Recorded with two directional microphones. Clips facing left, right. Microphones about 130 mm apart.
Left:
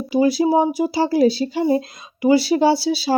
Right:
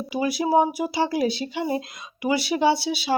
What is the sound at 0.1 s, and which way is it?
Speech, 30° left (ahead or behind).